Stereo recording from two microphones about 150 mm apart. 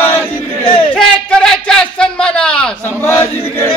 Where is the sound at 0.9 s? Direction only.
5° left (ahead or behind).